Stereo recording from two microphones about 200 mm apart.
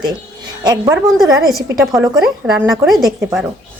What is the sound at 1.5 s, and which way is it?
A woman's voice, centre (ahead or behind).